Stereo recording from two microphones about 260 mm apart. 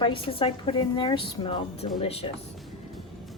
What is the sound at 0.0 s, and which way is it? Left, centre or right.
A woman's voice, centre.